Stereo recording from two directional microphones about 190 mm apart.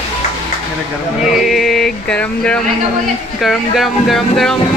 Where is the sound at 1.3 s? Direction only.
Centre (ahead or behind).